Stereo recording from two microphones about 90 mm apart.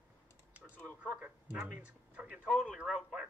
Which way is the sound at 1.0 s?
15° right (ahead or behind).